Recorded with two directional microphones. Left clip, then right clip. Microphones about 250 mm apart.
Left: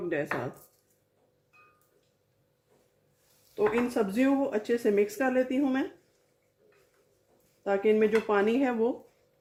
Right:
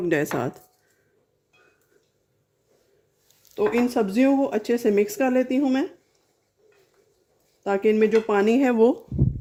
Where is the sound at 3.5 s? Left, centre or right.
Right.